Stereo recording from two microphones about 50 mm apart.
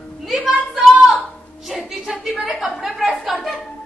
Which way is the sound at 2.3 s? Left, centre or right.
Centre.